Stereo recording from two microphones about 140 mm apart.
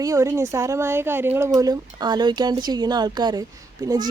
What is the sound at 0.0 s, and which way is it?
Speech, 20° right (ahead or behind).